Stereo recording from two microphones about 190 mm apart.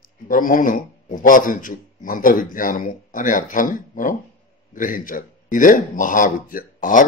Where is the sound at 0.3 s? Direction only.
45° left (ahead or behind).